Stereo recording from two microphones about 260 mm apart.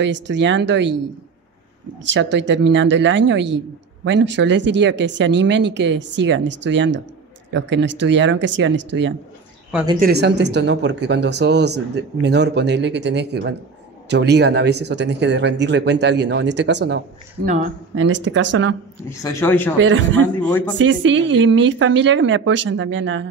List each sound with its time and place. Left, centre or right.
0.0 s a man's voice: right
2.3 s a man's voice: right
19.0 s a man's voice: centre
19.8 s a man's voice: right
20.2 s a man's voice: centre
20.7 s a man's voice: right